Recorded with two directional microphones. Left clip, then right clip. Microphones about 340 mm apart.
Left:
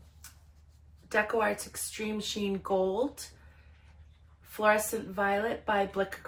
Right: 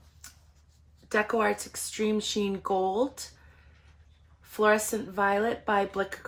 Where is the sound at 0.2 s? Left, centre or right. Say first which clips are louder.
Right 3 dB; right.